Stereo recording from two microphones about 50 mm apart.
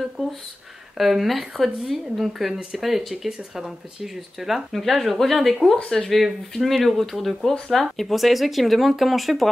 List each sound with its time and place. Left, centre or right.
0.2 s speech: centre